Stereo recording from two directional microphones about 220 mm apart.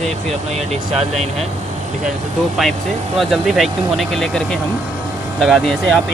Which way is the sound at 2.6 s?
Centre (ahead or behind).